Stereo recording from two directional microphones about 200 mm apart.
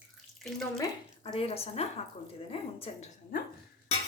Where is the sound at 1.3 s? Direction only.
30° left (ahead or behind).